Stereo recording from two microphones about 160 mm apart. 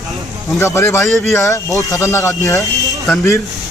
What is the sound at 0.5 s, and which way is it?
Speech, 15° left (ahead or behind).